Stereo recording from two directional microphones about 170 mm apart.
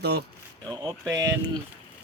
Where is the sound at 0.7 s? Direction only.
25° right (ahead or behind).